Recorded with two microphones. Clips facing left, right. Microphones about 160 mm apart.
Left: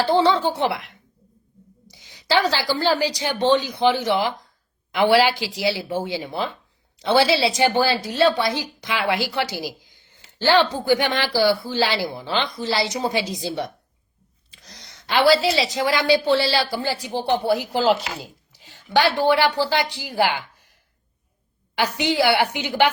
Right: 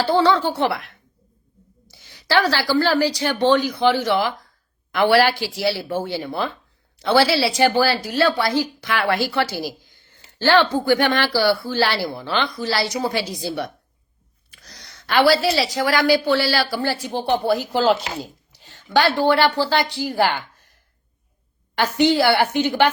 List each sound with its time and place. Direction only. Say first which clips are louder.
0.0 s a woman's voice: right 1 dB; 20° left (ahead or behind)
17.7 s speech: right 1 dB; centre (ahead or behind)
21.8 s speech: right 4 dB; 15° left (ahead or behind)